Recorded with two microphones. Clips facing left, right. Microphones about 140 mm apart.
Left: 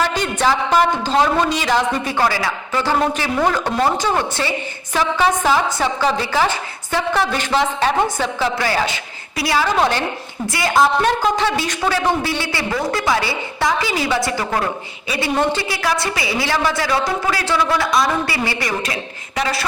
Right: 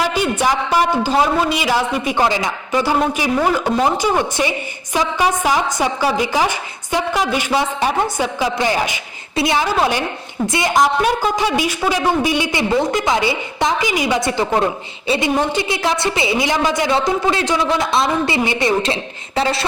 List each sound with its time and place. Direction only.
0.0 s a woman's voice: 10° right (ahead or behind)
9.7 s a woman's voice: 10° right (ahead or behind)
10.4 s a woman's voice: 20° right (ahead or behind)
11.0 s a woman's voice: 10° right (ahead or behind); by 19.6 s 25° right (ahead or behind)